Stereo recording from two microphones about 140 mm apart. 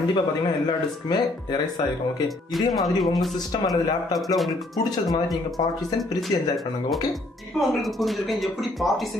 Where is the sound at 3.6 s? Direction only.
25° left (ahead or behind).